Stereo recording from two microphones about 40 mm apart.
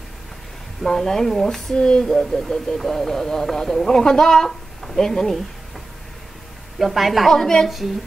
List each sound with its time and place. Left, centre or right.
0.8 s speech: centre
1.8 s speech: centre
2.0 s speech: centre
6.8 s a woman's voice: centre